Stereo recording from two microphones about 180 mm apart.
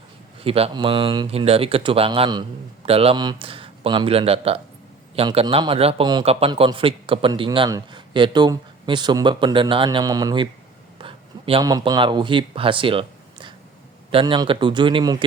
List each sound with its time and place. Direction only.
0.4 s a man's voice: 30° right (ahead or behind)
10.9 s a sound: 30° right (ahead or behind)
11.6 s a man's voice: 20° right (ahead or behind)